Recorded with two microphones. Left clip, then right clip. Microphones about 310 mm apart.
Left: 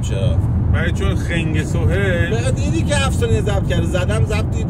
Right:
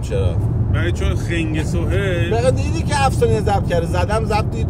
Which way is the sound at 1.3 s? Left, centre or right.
Centre.